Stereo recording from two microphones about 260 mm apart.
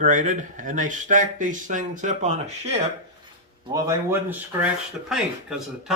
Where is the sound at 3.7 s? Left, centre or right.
Centre.